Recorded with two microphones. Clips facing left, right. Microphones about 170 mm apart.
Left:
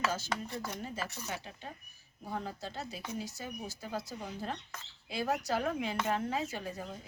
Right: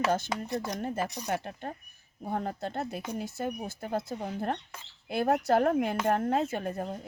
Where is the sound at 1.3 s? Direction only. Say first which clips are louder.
Right 9 dB; 55° right (ahead or behind).